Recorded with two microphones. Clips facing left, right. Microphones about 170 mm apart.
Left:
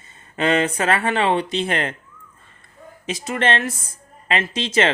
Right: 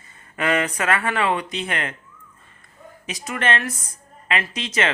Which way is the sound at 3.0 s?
30° left (ahead or behind).